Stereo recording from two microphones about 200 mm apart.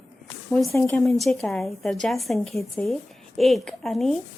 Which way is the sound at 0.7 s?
10° left (ahead or behind).